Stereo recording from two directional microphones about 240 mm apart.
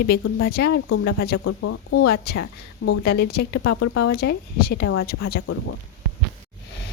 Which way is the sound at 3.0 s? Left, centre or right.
Left.